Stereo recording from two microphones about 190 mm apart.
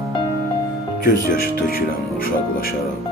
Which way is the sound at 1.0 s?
50° left (ahead or behind).